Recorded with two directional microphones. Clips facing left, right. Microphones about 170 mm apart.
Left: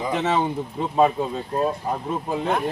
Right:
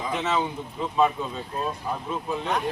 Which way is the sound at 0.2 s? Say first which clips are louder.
Left 3 dB; 40° left (ahead or behind).